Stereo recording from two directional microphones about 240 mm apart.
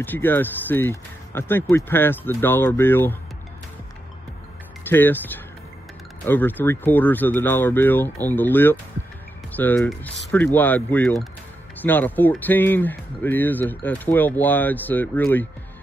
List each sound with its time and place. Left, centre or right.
0.0 s speech: centre
4.8 s speech: centre